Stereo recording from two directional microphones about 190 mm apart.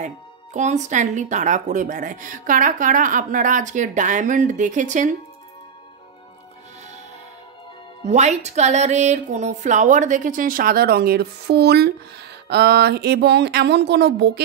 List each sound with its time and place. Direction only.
0.0 s speech: 40° right (ahead or behind)
8.0 s speech: 35° right (ahead or behind); by 14.4 s 60° right (ahead or behind)